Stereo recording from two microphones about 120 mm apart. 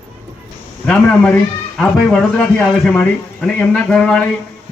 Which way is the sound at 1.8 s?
10° left (ahead or behind).